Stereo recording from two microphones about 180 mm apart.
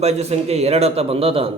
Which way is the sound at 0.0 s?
35° right (ahead or behind).